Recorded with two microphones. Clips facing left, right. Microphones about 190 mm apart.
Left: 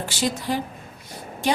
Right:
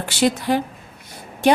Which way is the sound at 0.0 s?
65° right (ahead or behind).